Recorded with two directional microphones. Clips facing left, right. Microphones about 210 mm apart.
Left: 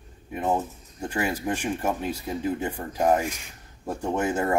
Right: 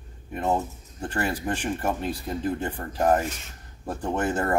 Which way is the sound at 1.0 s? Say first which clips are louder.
Left 1 dB; 10° left (ahead or behind).